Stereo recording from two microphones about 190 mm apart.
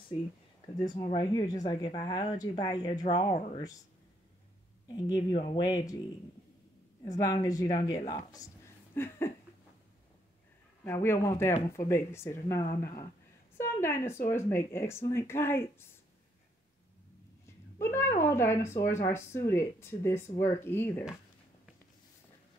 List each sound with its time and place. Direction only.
0.7 s speech: 25° left (ahead or behind)
4.8 s speech: 20° left (ahead or behind)
5.3 s speech: 30° left (ahead or behind)
5.6 s speech: 20° left (ahead or behind)
7.2 s speech: 20° left (ahead or behind)
10.8 s speech: 15° left (ahead or behind)
17.7 s a woman's voice: 15° left (ahead or behind)